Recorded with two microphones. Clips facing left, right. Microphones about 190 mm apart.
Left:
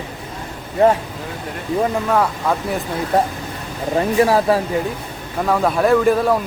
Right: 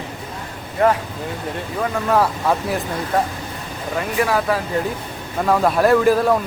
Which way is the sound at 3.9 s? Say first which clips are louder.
Left 5 dB; 30° left (ahead or behind).